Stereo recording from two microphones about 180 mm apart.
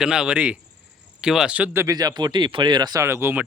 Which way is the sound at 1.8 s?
20° right (ahead or behind).